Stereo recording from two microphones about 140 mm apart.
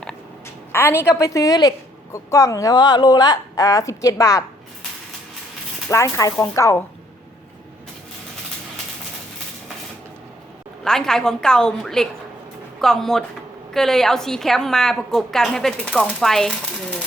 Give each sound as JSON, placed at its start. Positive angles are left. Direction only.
{"t": 0.4, "sound": "speech", "side_deg": 15}
{"t": 5.9, "sound": "speech", "side_deg": 20}
{"t": 10.8, "sound": "a woman's voice", "side_deg": 5}